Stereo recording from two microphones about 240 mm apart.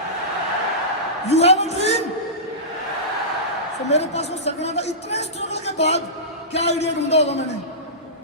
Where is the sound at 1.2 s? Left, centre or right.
Left.